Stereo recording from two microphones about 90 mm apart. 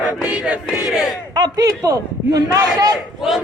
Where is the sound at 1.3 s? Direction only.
45° right (ahead or behind).